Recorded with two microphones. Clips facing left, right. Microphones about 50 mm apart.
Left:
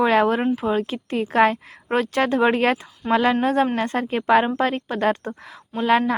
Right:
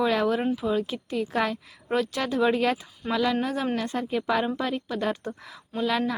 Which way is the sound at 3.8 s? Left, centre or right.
Left.